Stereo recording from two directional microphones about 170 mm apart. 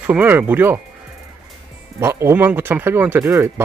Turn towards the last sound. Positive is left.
turn(degrees=-15)  # may be behind; listen again after turning